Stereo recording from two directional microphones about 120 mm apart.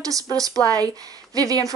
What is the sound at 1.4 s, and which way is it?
Speech, 30° right (ahead or behind).